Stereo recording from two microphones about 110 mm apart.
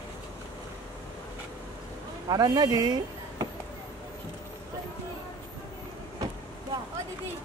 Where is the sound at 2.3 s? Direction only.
40° right (ahead or behind).